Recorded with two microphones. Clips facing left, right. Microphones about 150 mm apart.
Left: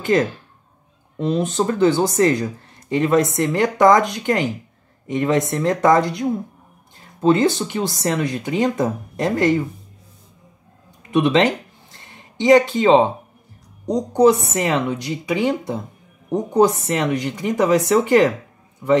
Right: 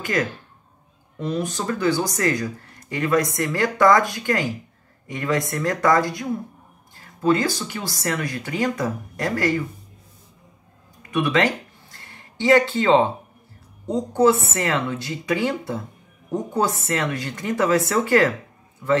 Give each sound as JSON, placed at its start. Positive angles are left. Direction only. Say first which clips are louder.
{"t": 0.0, "sound": "speech", "louder": "left 6 dB", "side_deg": 25}
{"t": 11.0, "sound": "a sound", "louder": "left 5 dB", "side_deg": 20}
{"t": 13.8, "sound": "speech", "louder": "left 3 dB", "side_deg": 15}